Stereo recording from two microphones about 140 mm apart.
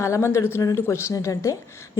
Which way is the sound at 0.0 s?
20° left (ahead or behind).